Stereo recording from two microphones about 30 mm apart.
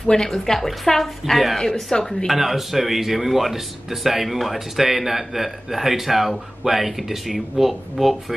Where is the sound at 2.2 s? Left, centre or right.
Centre.